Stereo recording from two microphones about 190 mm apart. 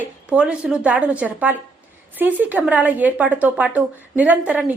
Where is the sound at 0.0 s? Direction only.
5° right (ahead or behind).